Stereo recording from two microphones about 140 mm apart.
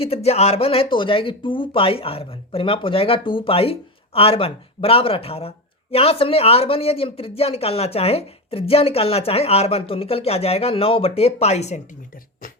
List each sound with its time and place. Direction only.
0.0 s speech: 45° left (ahead or behind)